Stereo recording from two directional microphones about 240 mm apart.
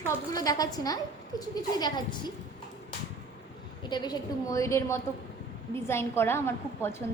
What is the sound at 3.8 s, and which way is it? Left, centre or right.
A woman's voice, centre.